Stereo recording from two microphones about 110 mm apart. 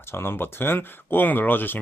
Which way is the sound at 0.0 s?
20° left (ahead or behind).